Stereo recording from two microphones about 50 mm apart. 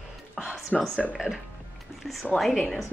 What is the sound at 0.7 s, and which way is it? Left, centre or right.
Speech, centre.